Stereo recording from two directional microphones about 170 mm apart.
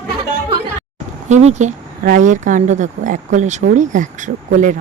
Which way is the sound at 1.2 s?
40° right (ahead or behind).